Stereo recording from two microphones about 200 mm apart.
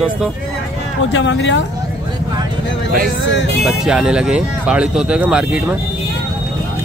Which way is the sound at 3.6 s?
5° right (ahead or behind).